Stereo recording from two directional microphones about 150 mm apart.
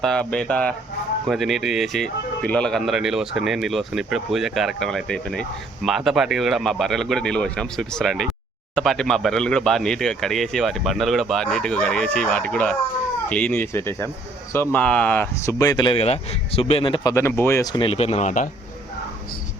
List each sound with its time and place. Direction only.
0.0 s speech: 5° left (ahead or behind); by 16.0 s 30° left (ahead or behind)
16.0 s speech: 40° left (ahead or behind)